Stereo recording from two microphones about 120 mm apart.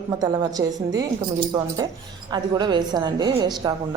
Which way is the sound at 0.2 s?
30° right (ahead or behind).